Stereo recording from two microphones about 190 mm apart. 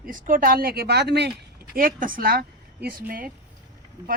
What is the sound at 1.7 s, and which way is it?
A woman's voice, 45° right (ahead or behind).